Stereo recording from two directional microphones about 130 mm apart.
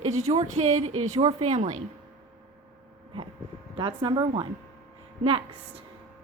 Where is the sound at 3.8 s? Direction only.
40° right (ahead or behind).